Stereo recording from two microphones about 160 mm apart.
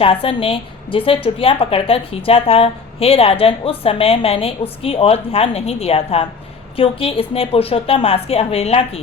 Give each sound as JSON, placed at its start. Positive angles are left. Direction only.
{"t": 0.0, "sound": "a woman's voice", "side_deg": 35}